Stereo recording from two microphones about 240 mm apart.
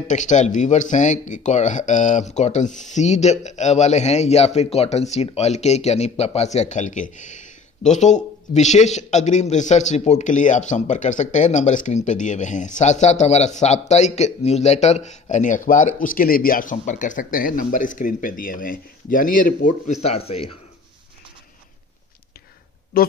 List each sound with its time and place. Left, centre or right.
0.1 s speech: left
22.9 s speech: left